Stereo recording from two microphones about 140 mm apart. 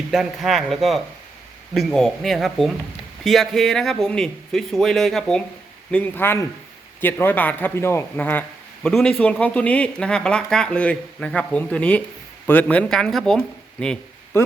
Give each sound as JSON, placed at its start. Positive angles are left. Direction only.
{"t": 0.1, "sound": "a man's voice", "side_deg": 0}